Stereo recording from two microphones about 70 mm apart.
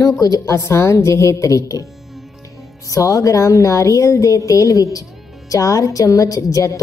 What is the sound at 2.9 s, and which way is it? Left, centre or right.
A woman's voice, left.